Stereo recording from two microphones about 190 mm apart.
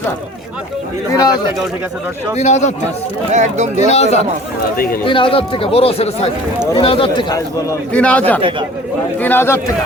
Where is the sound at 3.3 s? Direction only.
40° right (ahead or behind).